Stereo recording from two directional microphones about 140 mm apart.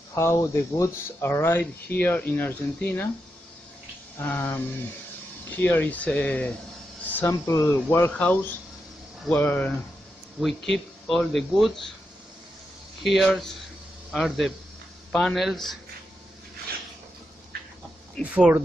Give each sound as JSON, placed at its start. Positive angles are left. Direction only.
{"t": 0.1, "sound": "speech", "side_deg": 20}
{"t": 4.2, "sound": "speech", "side_deg": 15}
{"t": 5.6, "sound": "speech", "side_deg": 10}
{"t": 10.4, "sound": "speech", "side_deg": 0}
{"t": 13.0, "sound": "speech", "side_deg": 0}
{"t": 18.2, "sound": "speech", "side_deg": -10}